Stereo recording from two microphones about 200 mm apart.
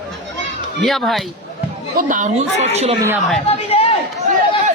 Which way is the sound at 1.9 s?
40° right (ahead or behind).